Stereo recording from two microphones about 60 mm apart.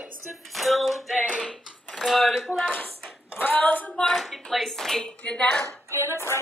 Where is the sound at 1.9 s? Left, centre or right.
Centre.